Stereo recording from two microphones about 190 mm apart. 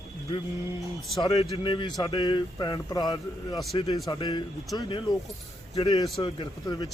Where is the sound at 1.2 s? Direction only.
30° left (ahead or behind).